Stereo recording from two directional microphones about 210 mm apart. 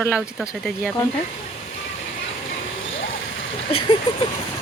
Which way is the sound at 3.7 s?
25° left (ahead or behind).